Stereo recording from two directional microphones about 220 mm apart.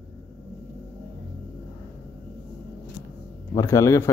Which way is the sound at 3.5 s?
15° left (ahead or behind).